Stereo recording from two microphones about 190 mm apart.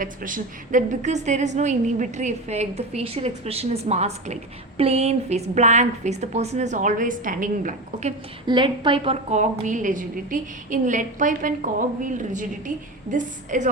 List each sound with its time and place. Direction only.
0.0 s a woman's voice: 45° right (ahead or behind)
8.4 s a woman's voice: 25° right (ahead or behind); by 13.7 s 40° right (ahead or behind)